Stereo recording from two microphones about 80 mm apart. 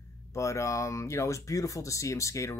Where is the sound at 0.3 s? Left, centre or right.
Left.